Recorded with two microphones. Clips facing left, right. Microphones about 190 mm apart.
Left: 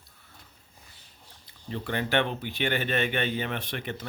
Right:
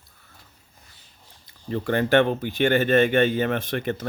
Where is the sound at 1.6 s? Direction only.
45° right (ahead or behind).